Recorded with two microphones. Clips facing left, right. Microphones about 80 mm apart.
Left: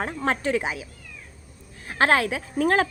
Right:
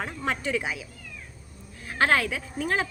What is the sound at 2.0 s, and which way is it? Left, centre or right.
Speech, left.